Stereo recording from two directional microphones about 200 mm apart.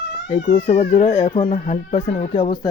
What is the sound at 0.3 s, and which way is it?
Speech, 35° left (ahead or behind).